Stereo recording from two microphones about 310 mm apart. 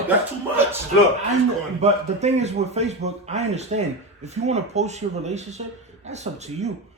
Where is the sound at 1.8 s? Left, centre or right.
Right.